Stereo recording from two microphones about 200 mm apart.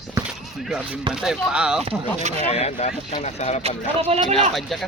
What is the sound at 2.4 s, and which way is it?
Speech, 35° left (ahead or behind).